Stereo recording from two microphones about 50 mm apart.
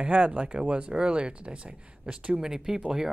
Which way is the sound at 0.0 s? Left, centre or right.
Right.